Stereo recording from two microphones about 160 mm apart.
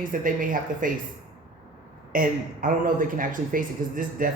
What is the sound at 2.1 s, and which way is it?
Speech, 60° right (ahead or behind).